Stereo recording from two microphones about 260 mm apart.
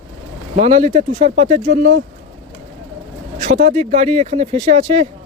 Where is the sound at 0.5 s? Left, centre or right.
Right.